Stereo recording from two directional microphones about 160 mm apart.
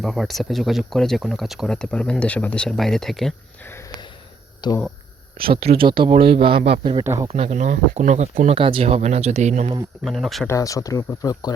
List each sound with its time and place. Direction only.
0.0 s speech: centre (ahead or behind)
4.6 s speech: 25° left (ahead or behind)
5.4 s speech: 35° right (ahead or behind)
10.0 s speech: centre (ahead or behind)
10.4 s speech: 20° left (ahead or behind)